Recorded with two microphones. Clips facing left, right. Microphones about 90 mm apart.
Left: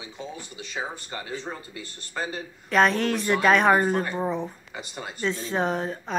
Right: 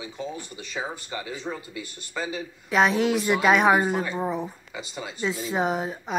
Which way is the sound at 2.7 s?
5° right (ahead or behind).